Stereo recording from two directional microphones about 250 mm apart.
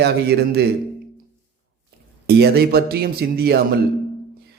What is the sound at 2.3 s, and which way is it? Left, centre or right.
A man's voice, right.